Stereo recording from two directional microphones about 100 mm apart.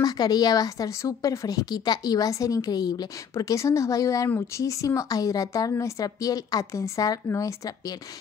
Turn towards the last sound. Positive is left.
turn(degrees=35)  # may be behind; listen again after turning